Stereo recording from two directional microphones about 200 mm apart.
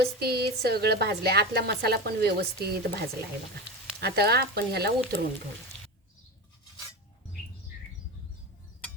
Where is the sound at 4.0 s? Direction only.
50° right (ahead or behind).